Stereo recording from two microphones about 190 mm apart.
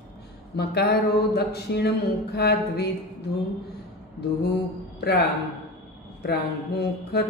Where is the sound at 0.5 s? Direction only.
60° left (ahead or behind).